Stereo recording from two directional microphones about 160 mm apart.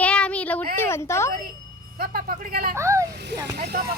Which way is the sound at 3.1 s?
90° right.